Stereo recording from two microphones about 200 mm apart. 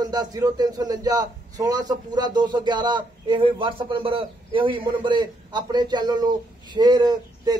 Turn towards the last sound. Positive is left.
turn(degrees=-20)  # may be behind; listen again after turning